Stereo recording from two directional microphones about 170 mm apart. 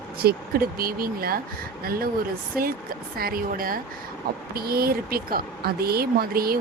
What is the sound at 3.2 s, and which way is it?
Speech, 60° right (ahead or behind).